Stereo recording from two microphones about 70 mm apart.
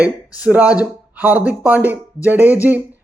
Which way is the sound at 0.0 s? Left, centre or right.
Right.